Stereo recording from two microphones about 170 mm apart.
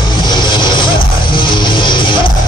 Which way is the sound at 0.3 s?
25° left (ahead or behind).